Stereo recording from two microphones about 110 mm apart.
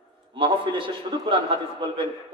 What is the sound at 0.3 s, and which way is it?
A man's voice, 50° right (ahead or behind).